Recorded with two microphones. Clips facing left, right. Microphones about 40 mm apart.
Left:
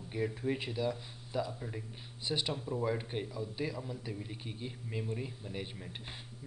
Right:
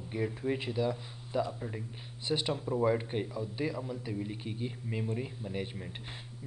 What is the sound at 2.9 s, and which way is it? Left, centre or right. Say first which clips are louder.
Speech: right 4 dB; centre.